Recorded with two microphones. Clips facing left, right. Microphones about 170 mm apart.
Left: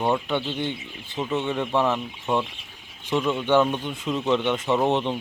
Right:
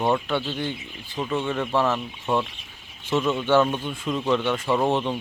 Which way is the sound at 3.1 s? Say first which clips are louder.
Even; 15° left (ahead or behind).